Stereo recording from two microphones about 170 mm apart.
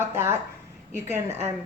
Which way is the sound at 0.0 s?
15° right (ahead or behind).